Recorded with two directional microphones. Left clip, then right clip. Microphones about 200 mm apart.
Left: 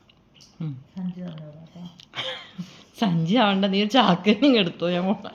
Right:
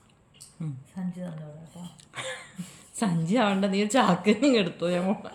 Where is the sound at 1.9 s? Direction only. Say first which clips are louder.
Left 5 dB; 15° right (ahead or behind).